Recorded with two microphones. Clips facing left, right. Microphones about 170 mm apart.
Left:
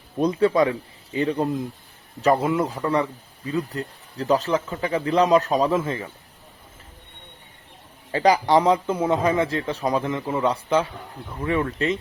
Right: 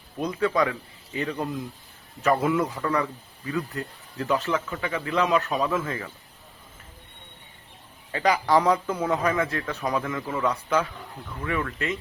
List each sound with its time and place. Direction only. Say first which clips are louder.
0.2 s a man's voice: left 5 dB; 30° left (ahead or behind)
4.2 s a man's voice: left 4 dB; 35° left (ahead or behind)
8.1 s speech: left 4 dB; 30° left (ahead or behind)